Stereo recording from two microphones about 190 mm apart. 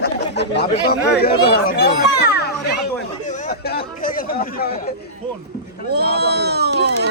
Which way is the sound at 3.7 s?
50° left (ahead or behind).